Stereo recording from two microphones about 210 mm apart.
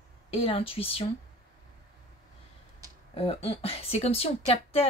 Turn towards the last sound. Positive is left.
turn(degrees=30)  # may be behind; listen again after turning